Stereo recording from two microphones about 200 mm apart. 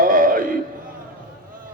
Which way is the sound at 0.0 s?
45° right (ahead or behind).